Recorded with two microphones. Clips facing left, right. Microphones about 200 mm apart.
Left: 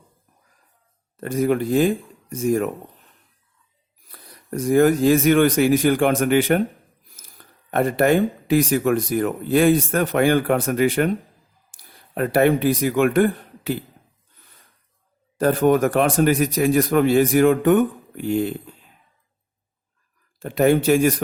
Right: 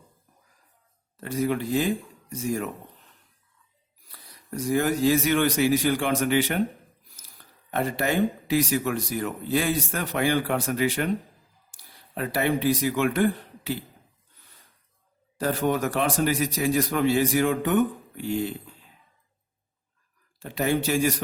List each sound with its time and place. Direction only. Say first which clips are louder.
1.2 s speech: left 6 dB; 50° left (ahead or behind)
4.1 s speech: left 6 dB; 50° left (ahead or behind)
15.4 s speech: left 8 dB; 50° left (ahead or behind)
20.4 s speech: left 8 dB; 55° left (ahead or behind)